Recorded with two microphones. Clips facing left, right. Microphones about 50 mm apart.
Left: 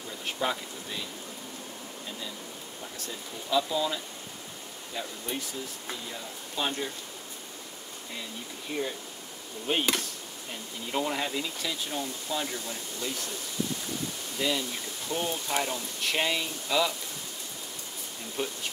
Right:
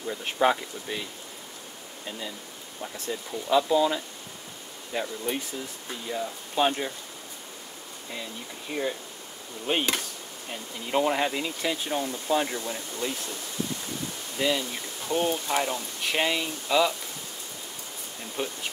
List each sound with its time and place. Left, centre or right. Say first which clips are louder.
0.1 s speech: right 7 dB; right
2.0 s speech: right 4 dB; right
6.5 s speech: right 6 dB; right
8.7 s speech: right 3 dB; right
14.4 s speech: right 3 dB; centre
18.3 s speech: right 1 dB; centre